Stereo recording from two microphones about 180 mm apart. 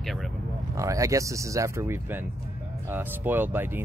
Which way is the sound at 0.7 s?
15° right (ahead or behind).